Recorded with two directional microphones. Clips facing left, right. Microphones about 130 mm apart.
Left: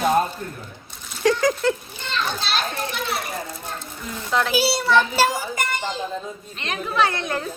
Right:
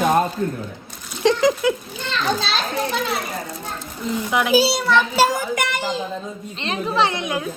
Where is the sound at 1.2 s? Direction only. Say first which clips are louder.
Right 2 dB; 20° right (ahead or behind).